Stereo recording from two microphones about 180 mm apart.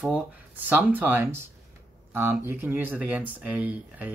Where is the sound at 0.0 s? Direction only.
10° right (ahead or behind).